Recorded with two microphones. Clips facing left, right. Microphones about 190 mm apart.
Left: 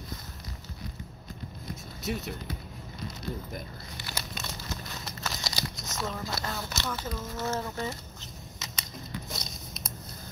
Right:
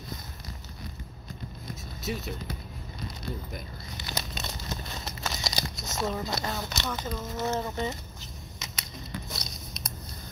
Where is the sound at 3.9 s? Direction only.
20° right (ahead or behind).